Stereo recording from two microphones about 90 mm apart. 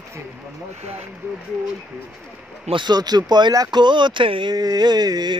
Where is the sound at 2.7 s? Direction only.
60° right (ahead or behind).